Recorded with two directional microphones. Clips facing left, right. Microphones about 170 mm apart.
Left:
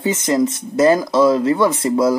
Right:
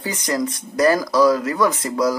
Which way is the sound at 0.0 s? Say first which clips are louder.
Left 6 dB; 25° left (ahead or behind).